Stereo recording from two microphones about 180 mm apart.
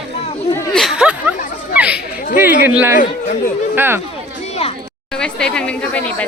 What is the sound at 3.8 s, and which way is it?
Speech, 10° right (ahead or behind).